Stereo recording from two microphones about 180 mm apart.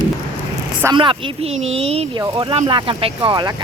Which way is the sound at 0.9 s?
30° right (ahead or behind).